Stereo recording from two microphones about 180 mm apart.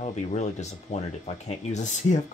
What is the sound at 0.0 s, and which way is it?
Speech, 40° left (ahead or behind).